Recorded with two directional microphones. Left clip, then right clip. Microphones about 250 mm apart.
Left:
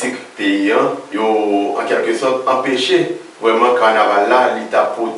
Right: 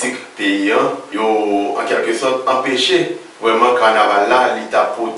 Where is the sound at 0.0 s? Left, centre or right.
Centre.